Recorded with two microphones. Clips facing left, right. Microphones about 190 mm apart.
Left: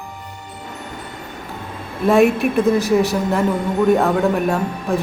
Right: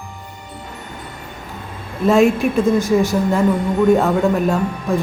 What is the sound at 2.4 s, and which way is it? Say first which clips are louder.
A man's voice: even; centre (ahead or behind).